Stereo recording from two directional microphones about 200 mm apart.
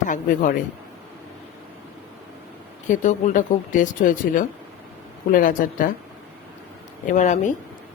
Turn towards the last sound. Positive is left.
turn(degrees=40)  # may be behind; listen again after turning